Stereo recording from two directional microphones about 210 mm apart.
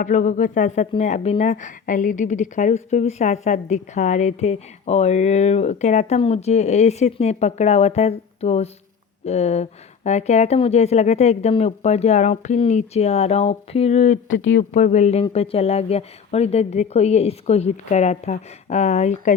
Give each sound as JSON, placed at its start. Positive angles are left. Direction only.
{"t": 0.0, "sound": "a woman's voice", "side_deg": 35}
{"t": 14.3, "sound": "speech", "side_deg": 60}
{"t": 14.7, "sound": "a woman's voice", "side_deg": 35}